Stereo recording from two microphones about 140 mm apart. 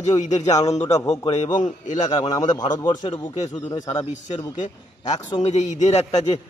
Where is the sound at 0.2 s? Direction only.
55° left (ahead or behind).